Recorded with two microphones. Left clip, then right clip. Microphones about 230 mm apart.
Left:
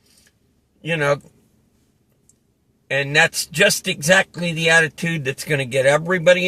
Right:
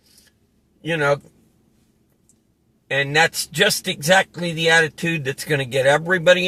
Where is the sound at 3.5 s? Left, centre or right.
Left.